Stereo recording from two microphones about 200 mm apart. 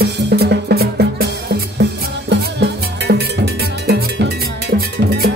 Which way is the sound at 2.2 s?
55° right (ahead or behind).